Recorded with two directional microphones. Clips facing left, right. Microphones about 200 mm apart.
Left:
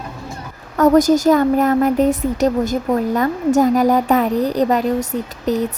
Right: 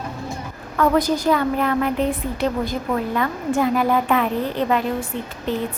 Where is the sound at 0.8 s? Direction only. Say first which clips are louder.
Left 7 dB; 45° left (ahead or behind).